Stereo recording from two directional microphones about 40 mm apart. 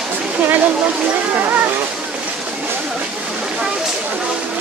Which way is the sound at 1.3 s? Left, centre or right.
Right.